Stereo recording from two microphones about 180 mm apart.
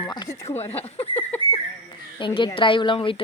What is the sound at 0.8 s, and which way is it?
Speech, 35° left (ahead or behind).